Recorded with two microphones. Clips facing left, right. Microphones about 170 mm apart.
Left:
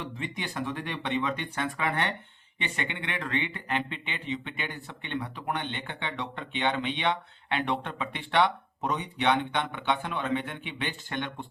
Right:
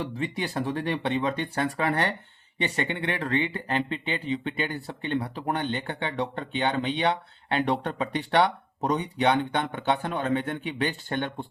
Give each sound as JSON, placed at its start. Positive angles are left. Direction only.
{"t": 0.0, "sound": "speech", "side_deg": -35}